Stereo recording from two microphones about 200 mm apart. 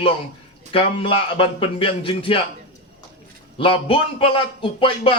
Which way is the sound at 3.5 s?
25° left (ahead or behind).